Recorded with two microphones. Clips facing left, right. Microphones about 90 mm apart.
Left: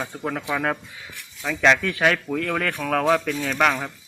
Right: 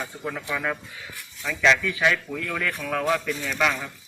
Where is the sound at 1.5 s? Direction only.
45° left (ahead or behind).